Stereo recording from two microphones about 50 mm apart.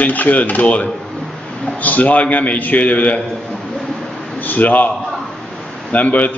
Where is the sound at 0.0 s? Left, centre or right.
Left.